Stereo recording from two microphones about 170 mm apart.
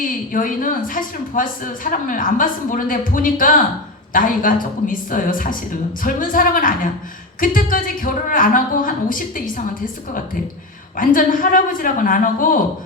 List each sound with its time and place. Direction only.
0.3 s speech: 50° left (ahead or behind)
10.9 s speech: 55° left (ahead or behind)